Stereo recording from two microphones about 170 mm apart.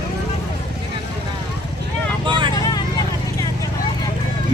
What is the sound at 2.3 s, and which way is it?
Vehicle, 30° right (ahead or behind).